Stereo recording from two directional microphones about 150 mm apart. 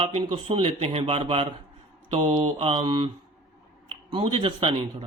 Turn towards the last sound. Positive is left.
turn(degrees=-35)  # may be behind; listen again after turning